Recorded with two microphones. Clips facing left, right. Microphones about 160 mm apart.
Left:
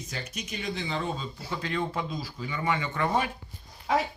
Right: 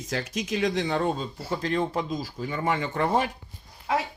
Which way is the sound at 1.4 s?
35° right (ahead or behind).